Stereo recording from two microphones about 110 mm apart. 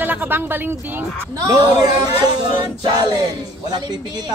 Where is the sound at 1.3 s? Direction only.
35° right (ahead or behind).